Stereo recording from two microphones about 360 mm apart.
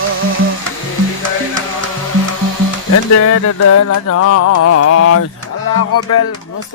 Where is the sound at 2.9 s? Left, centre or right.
Left.